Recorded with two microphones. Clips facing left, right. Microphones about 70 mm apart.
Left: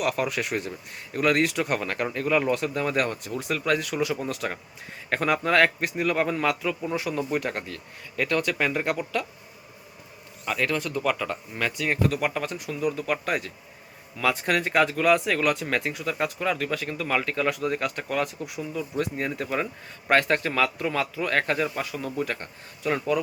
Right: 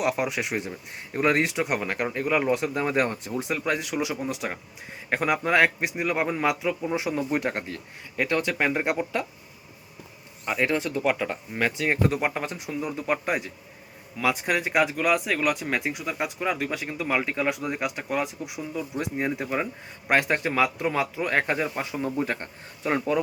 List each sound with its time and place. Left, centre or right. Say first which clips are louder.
0.0 s speech: even; centre
10.4 s speech: right 2 dB; right
14.2 s speech: left 1 dB; centre; by 23.2 s right